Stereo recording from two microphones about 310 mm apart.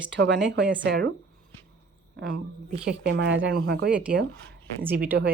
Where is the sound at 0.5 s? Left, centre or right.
Right.